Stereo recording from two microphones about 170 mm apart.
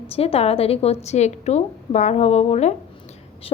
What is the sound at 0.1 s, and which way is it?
Speech, 35° left (ahead or behind).